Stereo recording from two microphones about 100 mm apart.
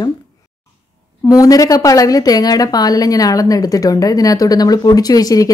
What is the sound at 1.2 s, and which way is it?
A woman's voice, 35° left (ahead or behind).